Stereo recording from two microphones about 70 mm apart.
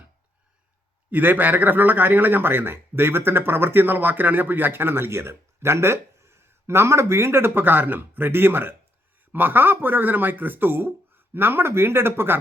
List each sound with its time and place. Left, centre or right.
1.1 s speech: right